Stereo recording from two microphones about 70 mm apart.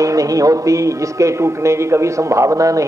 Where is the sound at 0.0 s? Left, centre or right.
Right.